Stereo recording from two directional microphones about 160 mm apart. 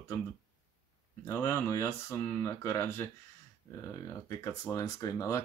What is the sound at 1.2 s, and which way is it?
Speech, 15° left (ahead or behind).